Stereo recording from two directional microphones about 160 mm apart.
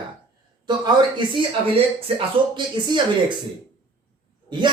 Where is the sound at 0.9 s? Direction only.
30° right (ahead or behind).